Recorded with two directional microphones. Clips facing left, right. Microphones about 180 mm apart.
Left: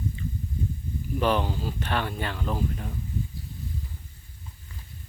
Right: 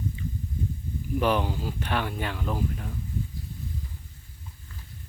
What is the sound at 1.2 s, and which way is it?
Speech, 10° right (ahead or behind).